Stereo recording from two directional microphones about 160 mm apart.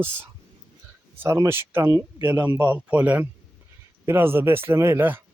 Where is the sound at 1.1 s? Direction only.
15° right (ahead or behind).